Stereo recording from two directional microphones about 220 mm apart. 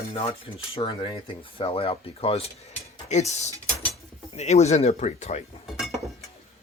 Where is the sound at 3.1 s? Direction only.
30° left (ahead or behind).